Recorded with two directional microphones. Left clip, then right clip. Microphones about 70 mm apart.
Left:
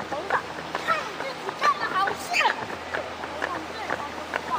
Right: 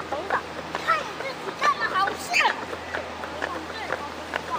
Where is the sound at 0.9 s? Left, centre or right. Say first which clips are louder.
Right 2 dB; right.